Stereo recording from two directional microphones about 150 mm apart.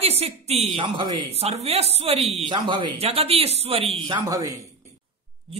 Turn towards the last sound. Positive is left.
turn(degrees=-35)  # may be behind; listen again after turning